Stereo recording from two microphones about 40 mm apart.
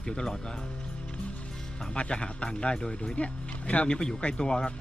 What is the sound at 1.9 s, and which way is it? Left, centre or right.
Speech, left.